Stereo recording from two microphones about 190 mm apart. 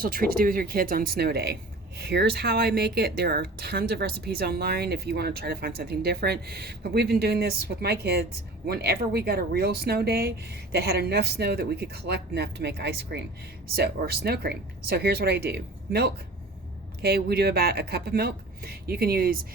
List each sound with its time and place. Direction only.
0.0 s speech: 50° right (ahead or behind)